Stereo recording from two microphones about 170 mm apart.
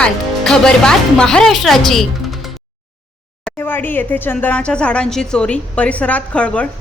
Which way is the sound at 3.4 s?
10° left (ahead or behind).